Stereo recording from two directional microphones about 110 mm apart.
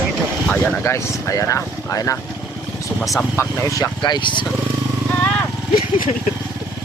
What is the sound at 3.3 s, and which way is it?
Speech, 25° left (ahead or behind).